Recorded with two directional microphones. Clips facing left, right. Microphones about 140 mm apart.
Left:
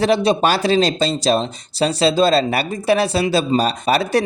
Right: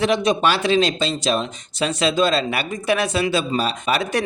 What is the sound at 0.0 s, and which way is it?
Speech, 35° left (ahead or behind).